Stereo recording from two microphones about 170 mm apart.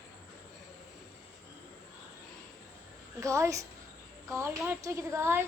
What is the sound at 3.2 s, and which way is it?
A woman's voice, 15° right (ahead or behind).